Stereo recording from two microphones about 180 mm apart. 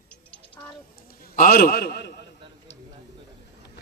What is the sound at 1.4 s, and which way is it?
Speech, 55° left (ahead or behind).